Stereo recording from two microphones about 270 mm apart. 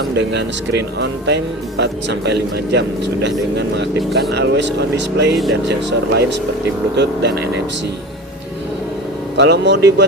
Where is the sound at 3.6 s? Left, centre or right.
Right.